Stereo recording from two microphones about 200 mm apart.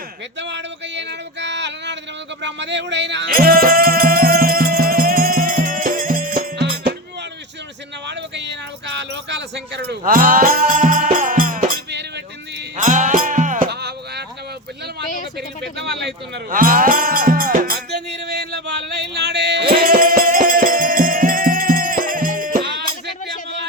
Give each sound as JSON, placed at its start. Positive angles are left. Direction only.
{"t": 0.3, "sound": "a sound", "side_deg": -60}
{"t": 2.4, "sound": "music", "side_deg": -60}
{"t": 8.0, "sound": "music", "side_deg": -60}
{"t": 10.0, "sound": "music", "side_deg": -45}
{"t": 12.7, "sound": "music", "side_deg": -40}
{"t": 13.7, "sound": "music", "side_deg": -55}
{"t": 15.4, "sound": "livestock", "side_deg": -55}